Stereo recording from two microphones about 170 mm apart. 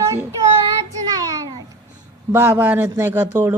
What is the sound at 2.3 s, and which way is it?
A man's voice, 10° right (ahead or behind).